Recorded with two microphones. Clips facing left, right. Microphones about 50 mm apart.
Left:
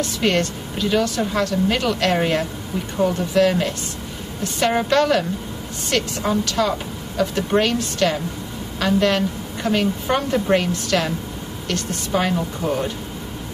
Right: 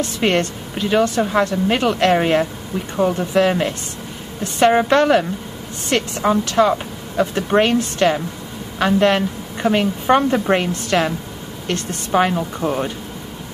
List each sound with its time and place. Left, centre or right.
0.0 s a woman's voice: right